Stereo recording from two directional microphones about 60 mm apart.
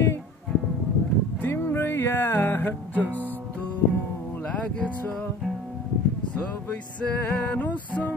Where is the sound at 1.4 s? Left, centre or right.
Left.